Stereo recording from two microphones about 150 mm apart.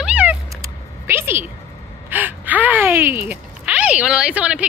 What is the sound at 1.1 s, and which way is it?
Speech, 15° right (ahead or behind).